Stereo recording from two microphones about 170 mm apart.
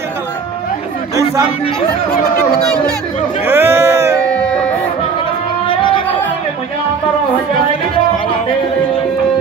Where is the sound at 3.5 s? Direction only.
15° right (ahead or behind).